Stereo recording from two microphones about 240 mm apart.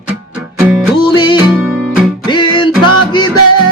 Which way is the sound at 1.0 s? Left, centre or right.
Centre.